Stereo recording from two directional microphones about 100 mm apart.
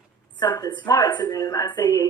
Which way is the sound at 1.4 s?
35° left (ahead or behind).